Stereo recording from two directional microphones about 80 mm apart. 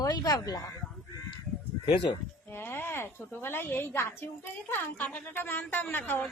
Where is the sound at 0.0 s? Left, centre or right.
Left.